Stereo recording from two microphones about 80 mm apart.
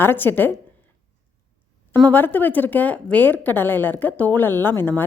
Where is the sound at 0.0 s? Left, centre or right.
Left.